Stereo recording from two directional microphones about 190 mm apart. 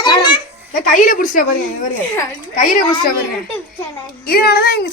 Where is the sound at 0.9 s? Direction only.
45° left (ahead or behind).